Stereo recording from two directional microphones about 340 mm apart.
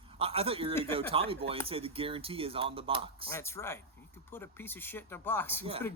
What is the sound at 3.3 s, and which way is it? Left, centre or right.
Speech, centre.